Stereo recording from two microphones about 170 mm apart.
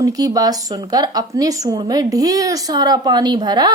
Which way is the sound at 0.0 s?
20° right (ahead or behind).